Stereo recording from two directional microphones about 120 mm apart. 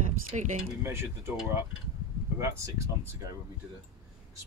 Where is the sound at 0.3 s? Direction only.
65° right (ahead or behind).